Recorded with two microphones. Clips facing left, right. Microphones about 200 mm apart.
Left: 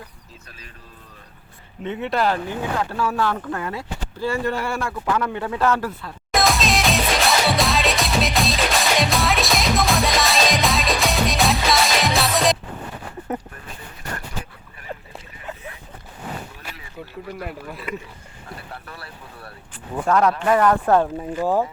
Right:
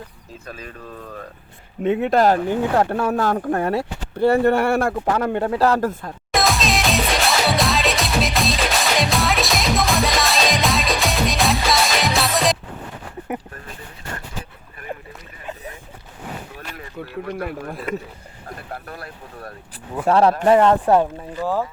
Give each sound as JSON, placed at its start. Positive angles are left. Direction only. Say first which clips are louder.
{"t": 1.8, "sound": "speech", "louder": "right 6 dB", "side_deg": -50}
{"t": 6.3, "sound": "music", "louder": "even", "side_deg": 0}
{"t": 16.7, "sound": "speech", "louder": "right 7 dB", "side_deg": -60}
{"t": 20.1, "sound": "speech", "louder": "right 4 dB", "side_deg": -30}
{"t": 20.8, "sound": "speech", "louder": "right 1 dB", "side_deg": -15}
{"t": 21.4, "sound": "speech", "louder": "left 2 dB", "side_deg": 20}